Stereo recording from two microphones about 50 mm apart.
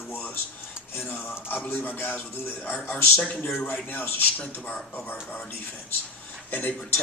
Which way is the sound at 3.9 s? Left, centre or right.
Left.